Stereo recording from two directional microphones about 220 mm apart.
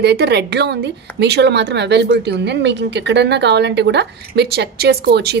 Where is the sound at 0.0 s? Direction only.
50° right (ahead or behind).